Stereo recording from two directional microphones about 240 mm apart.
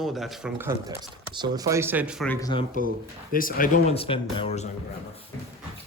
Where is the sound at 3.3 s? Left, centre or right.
Left.